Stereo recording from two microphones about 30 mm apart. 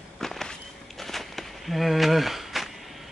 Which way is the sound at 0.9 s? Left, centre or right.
Centre.